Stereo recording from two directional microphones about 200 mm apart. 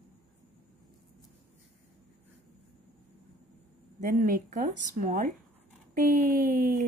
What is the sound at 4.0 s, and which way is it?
Speech, 45° right (ahead or behind).